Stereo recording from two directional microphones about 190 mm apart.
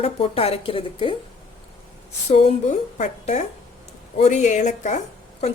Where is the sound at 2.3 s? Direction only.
35° left (ahead or behind).